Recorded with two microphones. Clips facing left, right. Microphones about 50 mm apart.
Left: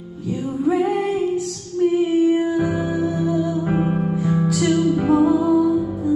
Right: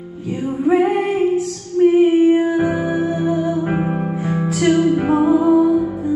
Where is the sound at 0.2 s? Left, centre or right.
Right.